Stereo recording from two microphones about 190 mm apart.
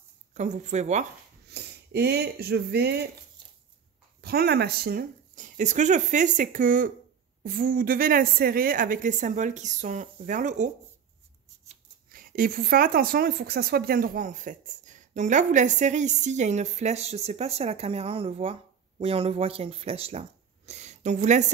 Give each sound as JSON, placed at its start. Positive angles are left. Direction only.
{"t": 0.3, "sound": "speech", "side_deg": -40}
{"t": 1.5, "sound": "speech", "side_deg": -60}
{"t": 4.2, "sound": "a woman's voice", "side_deg": -55}
{"t": 12.1, "sound": "speech", "side_deg": -50}